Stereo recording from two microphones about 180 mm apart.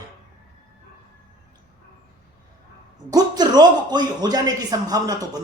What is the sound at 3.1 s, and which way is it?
Speech, 25° right (ahead or behind).